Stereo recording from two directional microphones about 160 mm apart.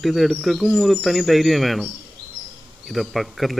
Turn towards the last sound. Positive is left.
turn(degrees=0)  # may be behind; listen again after turning